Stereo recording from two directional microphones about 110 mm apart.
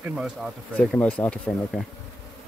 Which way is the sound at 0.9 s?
10° left (ahead or behind).